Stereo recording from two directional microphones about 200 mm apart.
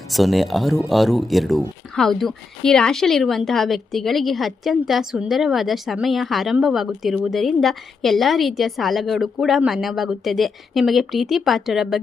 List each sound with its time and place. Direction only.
0.1 s speech: centre (ahead or behind)